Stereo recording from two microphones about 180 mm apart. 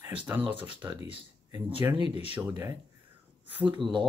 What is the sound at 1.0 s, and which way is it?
Speech, 30° right (ahead or behind).